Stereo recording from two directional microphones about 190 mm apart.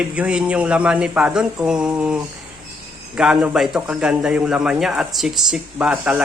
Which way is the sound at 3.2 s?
5° right (ahead or behind).